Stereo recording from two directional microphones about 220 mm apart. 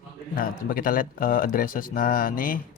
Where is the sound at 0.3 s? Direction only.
40° left (ahead or behind).